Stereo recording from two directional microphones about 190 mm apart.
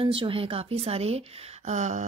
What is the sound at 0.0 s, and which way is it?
A woman's voice, 30° right (ahead or behind).